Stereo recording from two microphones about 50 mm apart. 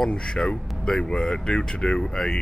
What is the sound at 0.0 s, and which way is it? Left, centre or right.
Speech, centre.